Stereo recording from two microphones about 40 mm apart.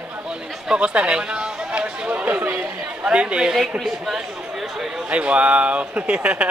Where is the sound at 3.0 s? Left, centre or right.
Right.